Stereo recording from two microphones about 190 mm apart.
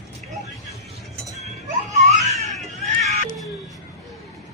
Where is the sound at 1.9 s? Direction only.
35° right (ahead or behind).